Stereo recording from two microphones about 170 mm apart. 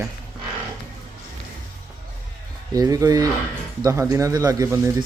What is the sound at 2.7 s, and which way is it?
A man's voice, 20° right (ahead or behind).